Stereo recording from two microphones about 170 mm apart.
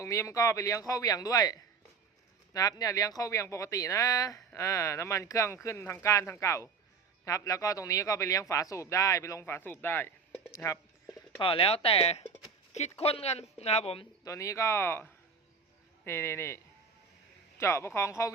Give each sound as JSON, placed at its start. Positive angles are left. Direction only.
{"t": 0.0, "sound": "a man's voice", "side_deg": 15}
{"t": 10.6, "sound": "a sound", "side_deg": 15}
{"t": 11.3, "sound": "speech", "side_deg": 35}
{"t": 14.3, "sound": "speech", "side_deg": 15}
{"t": 17.6, "sound": "speech", "side_deg": 15}